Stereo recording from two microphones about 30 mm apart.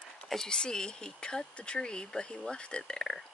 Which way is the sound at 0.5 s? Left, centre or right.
Left.